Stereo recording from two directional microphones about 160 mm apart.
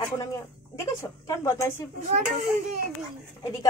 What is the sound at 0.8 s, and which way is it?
Speech, 20° left (ahead or behind).